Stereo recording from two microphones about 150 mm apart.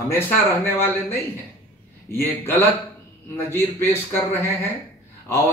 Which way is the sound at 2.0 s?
15° left (ahead or behind).